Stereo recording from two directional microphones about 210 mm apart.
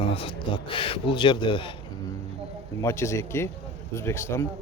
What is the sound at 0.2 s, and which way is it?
A man's voice, 25° left (ahead or behind).